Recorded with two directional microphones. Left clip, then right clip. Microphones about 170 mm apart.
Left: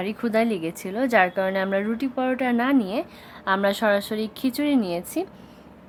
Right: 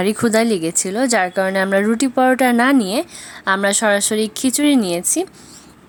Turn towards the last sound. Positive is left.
turn(degrees=-20)  # may be behind; listen again after turning